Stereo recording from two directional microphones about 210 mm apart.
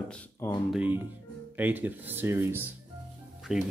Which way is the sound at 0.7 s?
5° right (ahead or behind).